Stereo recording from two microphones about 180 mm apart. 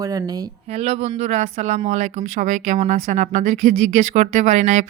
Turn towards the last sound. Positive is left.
turn(degrees=-40)  # may be behind; listen again after turning